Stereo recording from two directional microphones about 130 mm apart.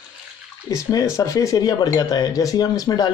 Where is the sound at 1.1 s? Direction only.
25° left (ahead or behind).